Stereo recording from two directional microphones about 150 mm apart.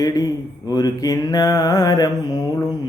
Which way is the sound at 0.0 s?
25° left (ahead or behind).